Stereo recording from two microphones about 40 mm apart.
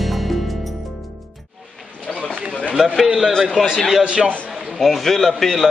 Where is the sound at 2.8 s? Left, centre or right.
Centre.